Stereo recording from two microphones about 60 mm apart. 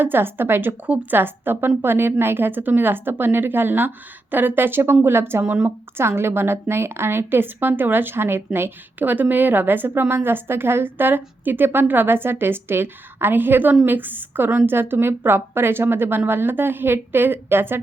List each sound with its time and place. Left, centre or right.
0.0 s a woman's voice: right